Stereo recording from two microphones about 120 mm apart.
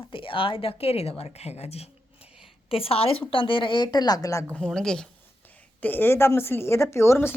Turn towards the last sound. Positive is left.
turn(degrees=20)  # may be behind; listen again after turning